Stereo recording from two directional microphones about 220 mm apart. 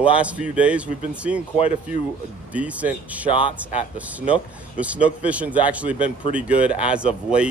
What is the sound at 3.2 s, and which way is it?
Speech, 25° left (ahead or behind).